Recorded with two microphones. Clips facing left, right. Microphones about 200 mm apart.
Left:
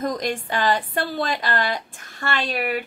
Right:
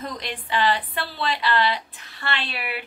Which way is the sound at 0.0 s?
45° left (ahead or behind).